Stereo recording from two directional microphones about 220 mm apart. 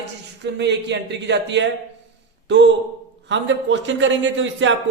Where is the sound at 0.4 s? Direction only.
50° right (ahead or behind).